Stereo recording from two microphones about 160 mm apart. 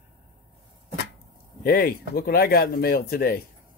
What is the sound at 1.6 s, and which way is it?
Speech, 70° left (ahead or behind).